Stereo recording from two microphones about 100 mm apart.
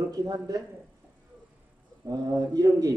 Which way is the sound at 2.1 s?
35° right (ahead or behind).